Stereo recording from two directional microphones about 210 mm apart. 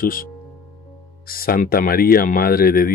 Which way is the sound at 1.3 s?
45° left (ahead or behind).